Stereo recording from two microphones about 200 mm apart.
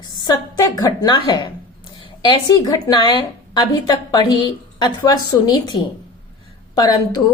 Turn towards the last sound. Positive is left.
turn(degrees=20)  # may be behind; listen again after turning